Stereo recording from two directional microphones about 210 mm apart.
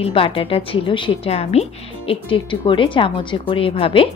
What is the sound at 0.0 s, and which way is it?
Speech, 25° left (ahead or behind).